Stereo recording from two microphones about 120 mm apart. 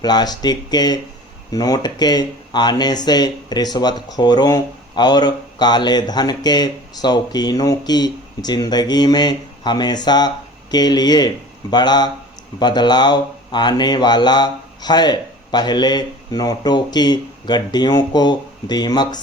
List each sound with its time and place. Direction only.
0.0 s speech: 35° left (ahead or behind)